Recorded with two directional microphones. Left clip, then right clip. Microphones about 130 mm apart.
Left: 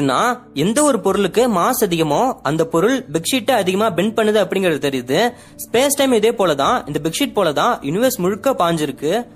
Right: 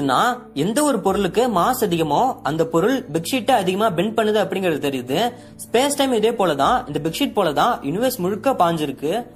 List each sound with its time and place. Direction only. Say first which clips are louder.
0.0 s speech: left 1 dB; 30° left (ahead or behind)